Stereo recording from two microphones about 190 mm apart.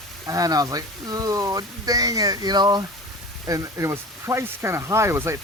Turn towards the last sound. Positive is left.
turn(degrees=-15)  # may be behind; listen again after turning